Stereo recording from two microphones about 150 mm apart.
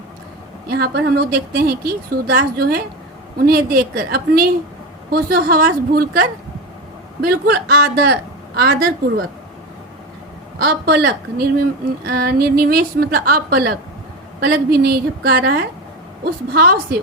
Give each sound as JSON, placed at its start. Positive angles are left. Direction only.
{"t": 0.7, "sound": "a woman's voice", "side_deg": -90}
{"t": 10.6, "sound": "a woman's voice", "side_deg": -90}